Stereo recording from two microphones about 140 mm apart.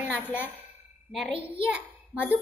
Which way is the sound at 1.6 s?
40° right (ahead or behind).